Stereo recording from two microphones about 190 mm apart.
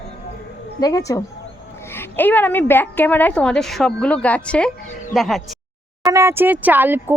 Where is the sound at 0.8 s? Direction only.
20° left (ahead or behind); by 5.4 s centre (ahead or behind).